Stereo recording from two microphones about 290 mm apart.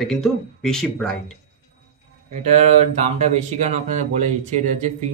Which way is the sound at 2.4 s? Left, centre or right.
Right.